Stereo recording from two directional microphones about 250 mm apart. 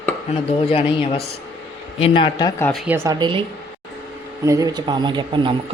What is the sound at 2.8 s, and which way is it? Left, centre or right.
Speech, centre.